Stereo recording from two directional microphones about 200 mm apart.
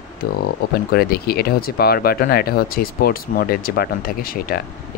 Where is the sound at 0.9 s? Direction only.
50° left (ahead or behind).